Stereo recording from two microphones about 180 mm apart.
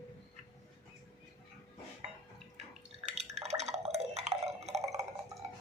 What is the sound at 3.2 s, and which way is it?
Drip, 35° right (ahead or behind).